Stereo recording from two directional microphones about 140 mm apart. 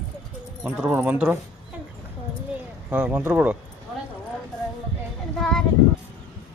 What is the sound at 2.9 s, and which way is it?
Speech, 10° right (ahead or behind).